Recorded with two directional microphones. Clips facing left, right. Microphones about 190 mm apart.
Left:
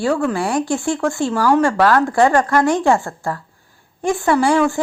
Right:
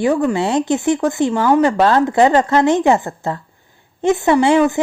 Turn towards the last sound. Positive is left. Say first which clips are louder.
# right 3 dB
turn(degrees=-20)  # may be behind; listen again after turning